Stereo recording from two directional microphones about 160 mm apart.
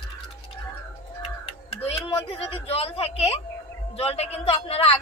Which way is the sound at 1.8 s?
35° left (ahead or behind).